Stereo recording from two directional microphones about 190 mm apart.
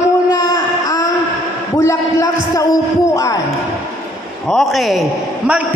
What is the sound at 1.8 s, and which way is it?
A man's voice, 15° left (ahead or behind).